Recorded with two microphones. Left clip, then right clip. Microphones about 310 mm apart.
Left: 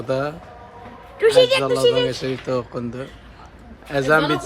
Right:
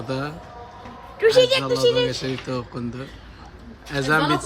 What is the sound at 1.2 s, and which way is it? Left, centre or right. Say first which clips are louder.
Speech: left 2 dB; left.